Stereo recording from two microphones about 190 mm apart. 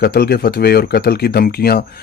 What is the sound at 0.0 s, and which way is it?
Speech, 55° left (ahead or behind).